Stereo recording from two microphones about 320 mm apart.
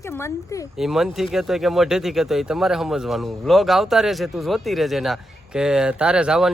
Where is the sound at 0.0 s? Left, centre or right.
Centre.